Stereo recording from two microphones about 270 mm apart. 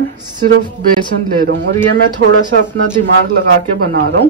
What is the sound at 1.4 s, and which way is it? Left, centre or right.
Speech, right.